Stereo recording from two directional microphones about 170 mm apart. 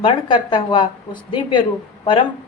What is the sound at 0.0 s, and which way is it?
A woman's voice, 30° left (ahead or behind).